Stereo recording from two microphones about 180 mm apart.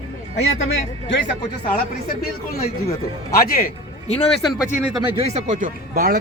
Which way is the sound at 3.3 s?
55° left (ahead or behind).